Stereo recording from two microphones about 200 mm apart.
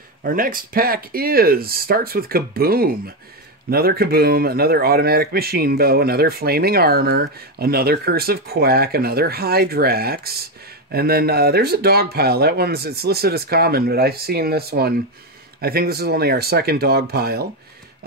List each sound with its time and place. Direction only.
0.2 s speech: 45° right (ahead or behind)